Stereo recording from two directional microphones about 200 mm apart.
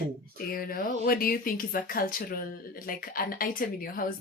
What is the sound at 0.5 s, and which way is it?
Speech, 45° left (ahead or behind).